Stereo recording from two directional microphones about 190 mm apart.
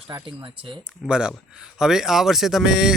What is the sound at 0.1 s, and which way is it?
Speech, 25° right (ahead or behind).